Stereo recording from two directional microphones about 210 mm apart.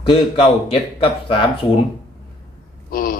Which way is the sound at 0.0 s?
25° left (ahead or behind).